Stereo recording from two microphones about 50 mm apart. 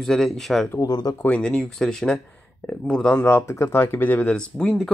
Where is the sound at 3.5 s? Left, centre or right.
Left.